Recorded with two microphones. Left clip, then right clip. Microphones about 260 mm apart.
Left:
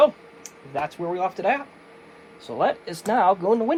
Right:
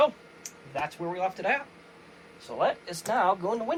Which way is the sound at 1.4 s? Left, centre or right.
Centre.